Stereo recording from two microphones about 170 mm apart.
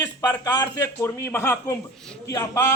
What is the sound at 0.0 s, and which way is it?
A man's voice, 20° left (ahead or behind).